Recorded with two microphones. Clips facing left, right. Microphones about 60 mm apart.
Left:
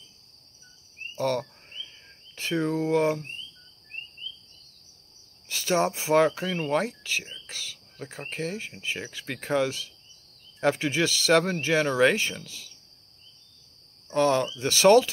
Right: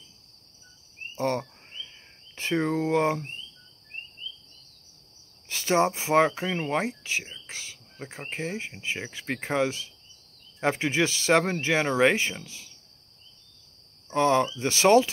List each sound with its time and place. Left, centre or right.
1.1 s speech: right
5.5 s speech: right
14.1 s speech: right